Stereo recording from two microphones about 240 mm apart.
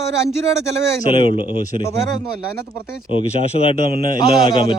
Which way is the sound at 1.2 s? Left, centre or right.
Right.